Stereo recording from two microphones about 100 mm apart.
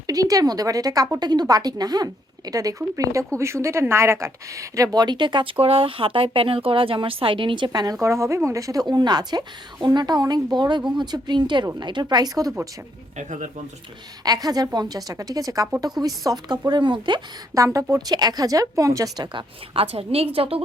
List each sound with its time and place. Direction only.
0.1 s a woman's voice: 40° right (ahead or behind)
8.0 s a woman's voice: 30° right (ahead or behind); by 12.0 s 50° right (ahead or behind)
12.0 s a woman's voice: 40° right (ahead or behind)
14.3 s a woman's voice: 40° right (ahead or behind)
17.5 s a woman's voice: 35° right (ahead or behind); by 20.6 s 70° right (ahead or behind)